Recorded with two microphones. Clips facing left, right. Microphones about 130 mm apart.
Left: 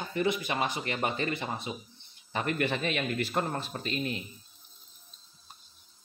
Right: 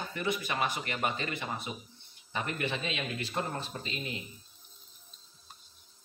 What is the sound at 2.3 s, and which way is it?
A man's voice, 40° left (ahead or behind).